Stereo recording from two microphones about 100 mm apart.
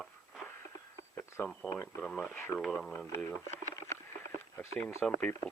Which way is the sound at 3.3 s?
30° left (ahead or behind).